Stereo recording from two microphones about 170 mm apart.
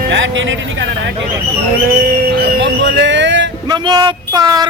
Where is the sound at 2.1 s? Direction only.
80° right.